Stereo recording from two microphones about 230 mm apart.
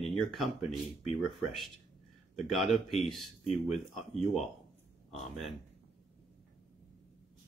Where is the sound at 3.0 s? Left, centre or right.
Centre.